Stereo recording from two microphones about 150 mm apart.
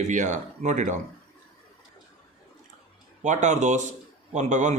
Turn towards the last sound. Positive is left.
turn(degrees=-50)  # may be behind; listen again after turning